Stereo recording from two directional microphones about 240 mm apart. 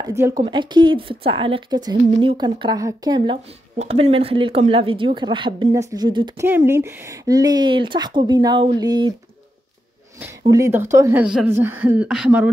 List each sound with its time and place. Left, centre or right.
0.0 s a woman's voice: centre
10.4 s speech: centre